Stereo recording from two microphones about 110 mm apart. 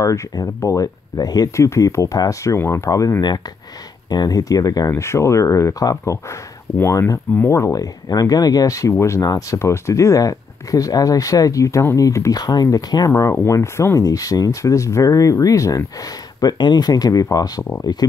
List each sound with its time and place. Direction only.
0.0 s speech: 30° left (ahead or behind)
16.3 s speech: 40° left (ahead or behind)